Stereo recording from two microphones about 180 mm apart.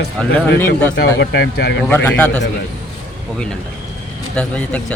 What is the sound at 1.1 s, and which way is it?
Speech, 70° left (ahead or behind).